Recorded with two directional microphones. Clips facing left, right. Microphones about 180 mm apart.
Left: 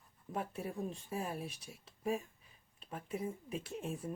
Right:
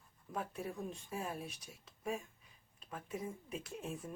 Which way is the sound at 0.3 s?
30° left (ahead or behind).